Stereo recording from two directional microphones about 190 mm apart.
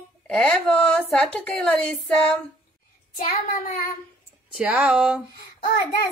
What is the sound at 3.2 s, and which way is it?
Speech, 45° left (ahead or behind).